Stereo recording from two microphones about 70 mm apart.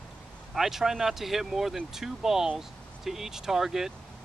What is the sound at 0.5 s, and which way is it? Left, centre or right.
Speech, centre.